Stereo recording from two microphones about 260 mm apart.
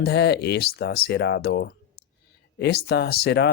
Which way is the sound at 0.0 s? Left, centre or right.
Left.